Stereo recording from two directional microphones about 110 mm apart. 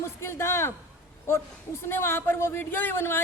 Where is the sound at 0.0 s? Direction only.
20° left (ahead or behind).